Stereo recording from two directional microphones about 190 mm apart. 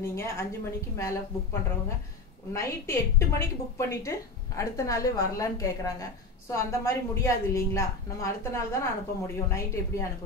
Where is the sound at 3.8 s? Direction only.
15° left (ahead or behind).